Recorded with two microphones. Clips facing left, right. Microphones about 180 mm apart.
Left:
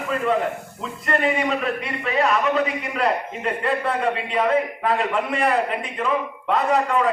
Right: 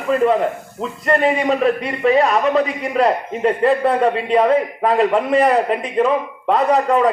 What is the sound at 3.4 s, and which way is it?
A man's voice, 35° right (ahead or behind).